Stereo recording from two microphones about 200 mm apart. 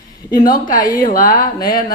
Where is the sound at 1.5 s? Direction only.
20° left (ahead or behind).